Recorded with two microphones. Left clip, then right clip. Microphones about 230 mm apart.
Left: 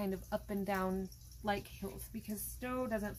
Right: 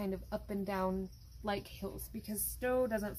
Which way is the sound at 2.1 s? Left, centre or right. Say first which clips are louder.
Right 2 dB; centre.